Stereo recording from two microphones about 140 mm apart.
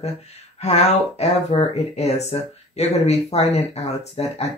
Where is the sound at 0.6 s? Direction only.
50° left (ahead or behind).